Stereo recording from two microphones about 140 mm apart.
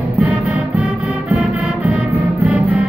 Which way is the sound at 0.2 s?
10° right (ahead or behind).